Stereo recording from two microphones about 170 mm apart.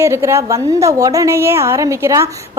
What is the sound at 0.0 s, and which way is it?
A woman's voice, 15° right (ahead or behind).